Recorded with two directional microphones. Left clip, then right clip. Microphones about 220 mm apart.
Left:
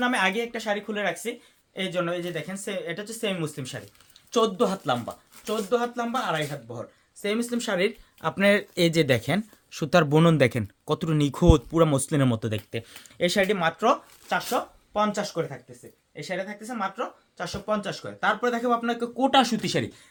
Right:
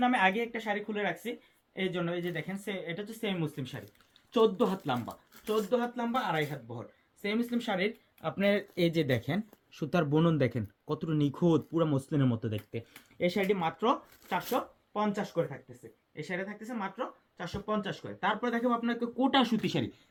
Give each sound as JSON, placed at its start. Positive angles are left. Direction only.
{"t": 0.0, "sound": "speech", "side_deg": 20}
{"t": 7.2, "sound": "speech", "side_deg": 35}
{"t": 14.3, "sound": "speech", "side_deg": 20}
{"t": 18.2, "sound": "speech", "side_deg": 20}